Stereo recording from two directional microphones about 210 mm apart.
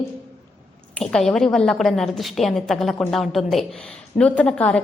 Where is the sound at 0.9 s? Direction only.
5° left (ahead or behind).